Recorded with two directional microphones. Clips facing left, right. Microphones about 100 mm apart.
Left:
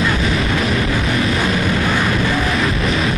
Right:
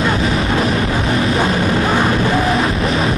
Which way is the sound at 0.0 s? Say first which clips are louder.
Right 2 dB; 35° right (ahead or behind).